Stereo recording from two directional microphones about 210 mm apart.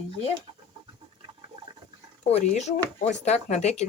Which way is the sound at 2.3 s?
35° left (ahead or behind).